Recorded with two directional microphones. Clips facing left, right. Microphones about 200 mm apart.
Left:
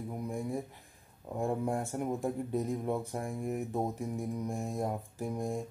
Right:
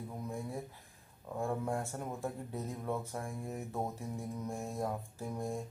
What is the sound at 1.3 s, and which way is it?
Speech, 15° left (ahead or behind).